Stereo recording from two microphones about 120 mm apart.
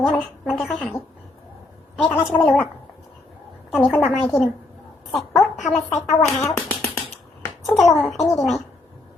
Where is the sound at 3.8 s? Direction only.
Centre (ahead or behind).